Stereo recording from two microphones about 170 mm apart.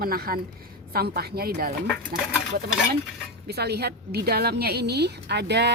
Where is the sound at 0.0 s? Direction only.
60° right (ahead or behind).